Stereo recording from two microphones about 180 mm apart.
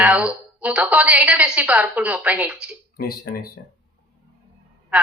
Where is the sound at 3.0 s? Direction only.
55° left (ahead or behind).